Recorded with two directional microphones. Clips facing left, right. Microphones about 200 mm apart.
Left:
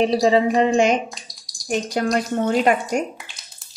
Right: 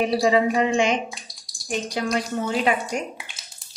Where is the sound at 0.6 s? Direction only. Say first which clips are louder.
Left 4 dB; 40° left (ahead or behind).